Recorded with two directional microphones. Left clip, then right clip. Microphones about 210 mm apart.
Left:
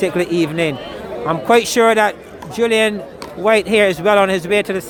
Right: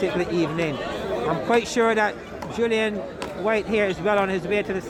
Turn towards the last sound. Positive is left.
turn(degrees=50)  # may be behind; listen again after turning